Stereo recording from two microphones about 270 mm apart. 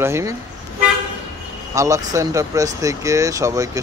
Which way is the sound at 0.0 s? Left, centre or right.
Centre.